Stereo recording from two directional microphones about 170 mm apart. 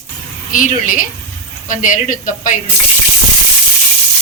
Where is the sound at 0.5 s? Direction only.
50° left (ahead or behind).